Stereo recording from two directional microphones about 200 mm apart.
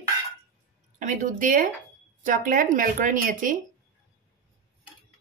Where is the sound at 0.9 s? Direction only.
40° right (ahead or behind).